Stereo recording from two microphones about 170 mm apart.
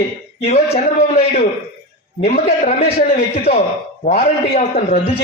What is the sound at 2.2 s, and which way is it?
Speech, 60° left (ahead or behind).